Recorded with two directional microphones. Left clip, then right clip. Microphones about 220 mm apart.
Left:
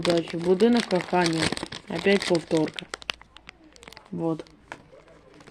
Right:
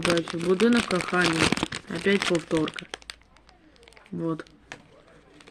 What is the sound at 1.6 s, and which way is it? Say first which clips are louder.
Crumpling: right 2 dB; 10° right (ahead or behind).